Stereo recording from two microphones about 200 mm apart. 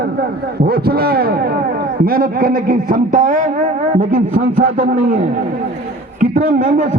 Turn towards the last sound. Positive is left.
turn(degrees=-40)  # may be behind; listen again after turning